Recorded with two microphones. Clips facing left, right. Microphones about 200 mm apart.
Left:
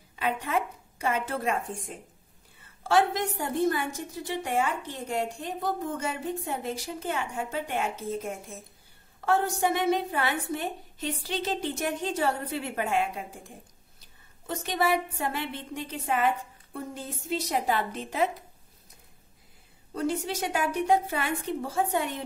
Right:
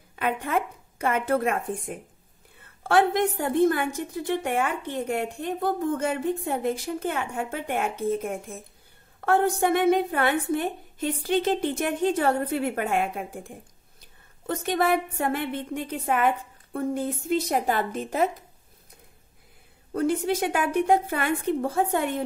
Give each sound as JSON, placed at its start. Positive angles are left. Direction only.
{"t": 0.1, "sound": "a woman's voice", "side_deg": -55}
{"t": 19.9, "sound": "a woman's voice", "side_deg": -55}